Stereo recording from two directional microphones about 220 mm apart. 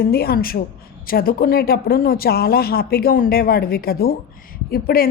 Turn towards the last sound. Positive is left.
turn(degrees=40)  # may be behind; listen again after turning